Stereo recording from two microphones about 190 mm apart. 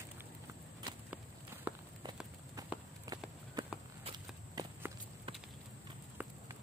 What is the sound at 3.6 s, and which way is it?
Walk, 20° right (ahead or behind).